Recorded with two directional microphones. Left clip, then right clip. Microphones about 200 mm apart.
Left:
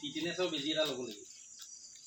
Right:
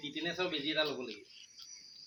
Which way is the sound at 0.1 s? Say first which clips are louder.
Even; 40° left (ahead or behind).